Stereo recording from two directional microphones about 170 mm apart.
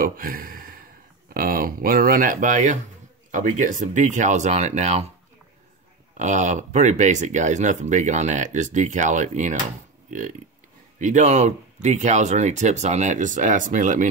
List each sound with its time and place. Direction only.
0.0 s a sound: 55° right (ahead or behind)
1.3 s speech: 55° right (ahead or behind); by 5.1 s 40° right (ahead or behind)
6.1 s speech: 45° right (ahead or behind)
11.0 s speech: 45° right (ahead or behind)